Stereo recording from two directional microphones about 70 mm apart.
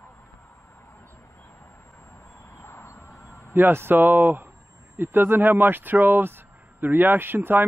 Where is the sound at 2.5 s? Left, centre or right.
Left.